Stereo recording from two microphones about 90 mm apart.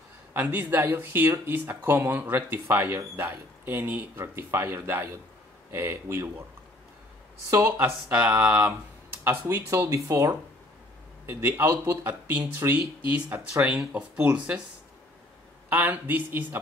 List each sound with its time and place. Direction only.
0.3 s speech: 20° right (ahead or behind)
7.5 s speech: 45° right (ahead or behind)
8.1 s speech: 15° right (ahead or behind)
9.8 s speech: 35° right (ahead or behind); by 14.6 s 15° right (ahead or behind)
15.7 s speech: 20° right (ahead or behind)